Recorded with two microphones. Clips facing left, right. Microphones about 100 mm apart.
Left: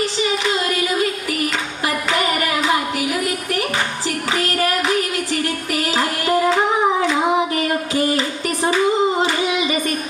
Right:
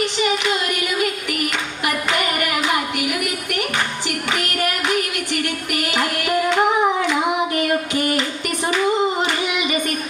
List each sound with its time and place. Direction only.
0.7 s music: 30° left (ahead or behind)
7.1 s child singing: 30° left (ahead or behind)